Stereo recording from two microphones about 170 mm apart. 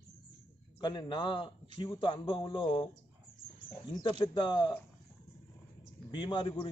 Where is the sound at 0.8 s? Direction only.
25° left (ahead or behind).